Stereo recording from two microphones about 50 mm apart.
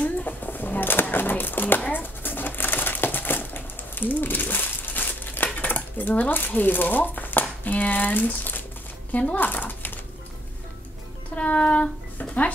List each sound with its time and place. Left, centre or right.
0.0 s a sound: left
1.9 s crumpling: left
7.6 s speech: left
9.3 s a sound: left
11.3 s child singing: left
12.2 s music: left